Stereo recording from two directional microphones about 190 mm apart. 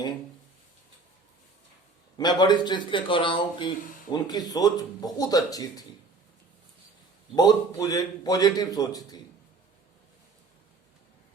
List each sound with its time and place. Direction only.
2.1 s a man's voice: 20° left (ahead or behind)
7.3 s a man's voice: 20° left (ahead or behind)